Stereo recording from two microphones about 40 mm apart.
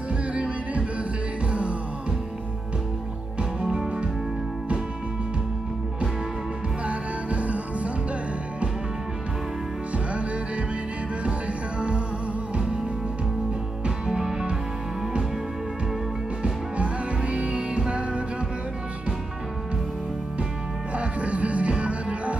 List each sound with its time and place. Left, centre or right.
0.3 s music: right
3.6 s music: centre
6.9 s music: right
14.0 s music: centre
16.7 s music: right
20.9 s music: right